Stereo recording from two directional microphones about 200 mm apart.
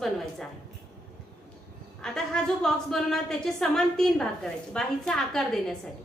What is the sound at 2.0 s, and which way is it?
A woman's voice, 5° left (ahead or behind).